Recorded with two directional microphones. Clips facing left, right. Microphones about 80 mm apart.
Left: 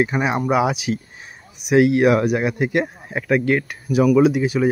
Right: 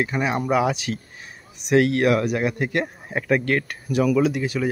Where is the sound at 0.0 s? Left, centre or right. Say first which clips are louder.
Left 4 dB; centre.